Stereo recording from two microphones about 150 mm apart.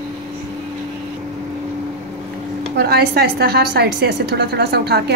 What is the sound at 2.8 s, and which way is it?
A woman's voice, 90° right.